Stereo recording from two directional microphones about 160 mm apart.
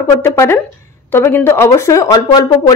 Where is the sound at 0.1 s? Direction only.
15° left (ahead or behind).